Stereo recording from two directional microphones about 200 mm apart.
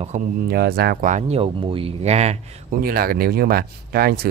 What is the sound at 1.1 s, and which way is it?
Speech, 30° right (ahead or behind).